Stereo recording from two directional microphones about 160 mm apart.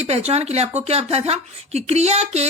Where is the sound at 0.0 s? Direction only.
40° right (ahead or behind).